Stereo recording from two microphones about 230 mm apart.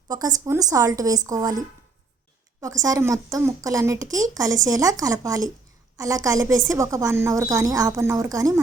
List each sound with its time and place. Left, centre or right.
0.1 s speech: centre